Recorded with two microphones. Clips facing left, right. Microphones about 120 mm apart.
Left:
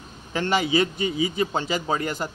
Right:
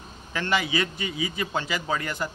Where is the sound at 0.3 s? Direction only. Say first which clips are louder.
Left 4 dB; 30° left (ahead or behind).